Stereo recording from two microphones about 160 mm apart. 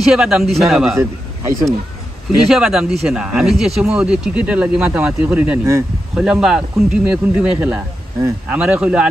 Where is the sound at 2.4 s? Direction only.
Centre (ahead or behind).